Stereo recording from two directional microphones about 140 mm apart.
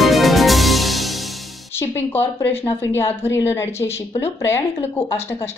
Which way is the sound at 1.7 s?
15° left (ahead or behind).